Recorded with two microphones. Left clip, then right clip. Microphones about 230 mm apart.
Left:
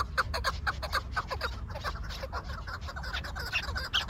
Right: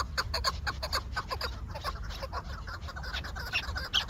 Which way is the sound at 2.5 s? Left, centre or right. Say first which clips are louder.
Left 2 dB; left.